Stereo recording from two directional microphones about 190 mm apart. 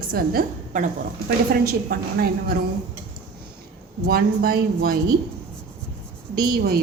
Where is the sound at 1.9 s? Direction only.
50° right (ahead or behind).